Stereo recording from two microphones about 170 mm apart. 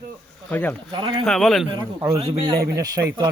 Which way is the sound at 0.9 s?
30° right (ahead or behind).